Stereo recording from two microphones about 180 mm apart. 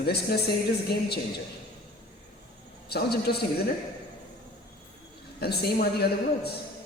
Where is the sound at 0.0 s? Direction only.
65° left (ahead or behind).